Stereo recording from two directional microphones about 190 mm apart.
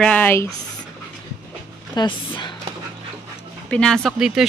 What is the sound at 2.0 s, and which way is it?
Speech, 25° left (ahead or behind).